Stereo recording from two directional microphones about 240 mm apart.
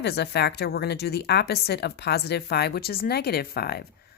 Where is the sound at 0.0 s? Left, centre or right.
Left.